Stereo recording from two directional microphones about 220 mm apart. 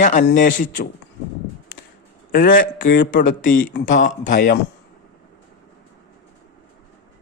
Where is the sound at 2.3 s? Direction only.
40° left (ahead or behind).